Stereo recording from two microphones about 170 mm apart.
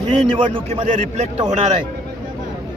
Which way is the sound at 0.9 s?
40° right (ahead or behind).